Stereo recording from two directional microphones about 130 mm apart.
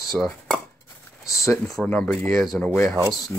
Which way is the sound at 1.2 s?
25° left (ahead or behind).